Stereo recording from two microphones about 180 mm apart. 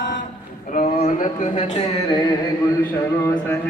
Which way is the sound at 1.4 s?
40° left (ahead or behind).